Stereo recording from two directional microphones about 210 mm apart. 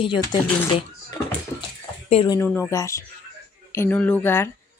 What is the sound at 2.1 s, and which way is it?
Speech, 25° left (ahead or behind).